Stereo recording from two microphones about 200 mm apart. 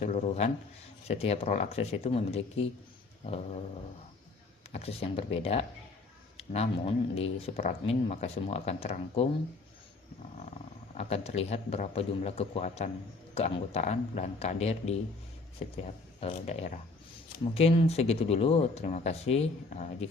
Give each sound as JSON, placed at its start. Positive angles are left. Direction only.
{"t": 0.0, "sound": "speech", "side_deg": 35}
{"t": 4.7, "sound": "speech", "side_deg": 30}
{"t": 10.9, "sound": "speech", "side_deg": 30}
{"t": 16.2, "sound": "speech", "side_deg": 30}